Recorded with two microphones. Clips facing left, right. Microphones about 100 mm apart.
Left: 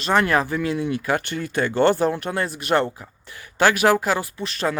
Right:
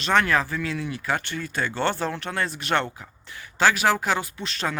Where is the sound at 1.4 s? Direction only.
50° left (ahead or behind).